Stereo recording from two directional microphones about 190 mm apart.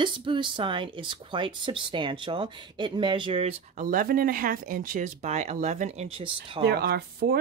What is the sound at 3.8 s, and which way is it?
Speech, 45° right (ahead or behind).